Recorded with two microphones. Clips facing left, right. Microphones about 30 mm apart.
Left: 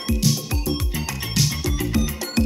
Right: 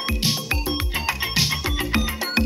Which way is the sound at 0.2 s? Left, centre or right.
Right.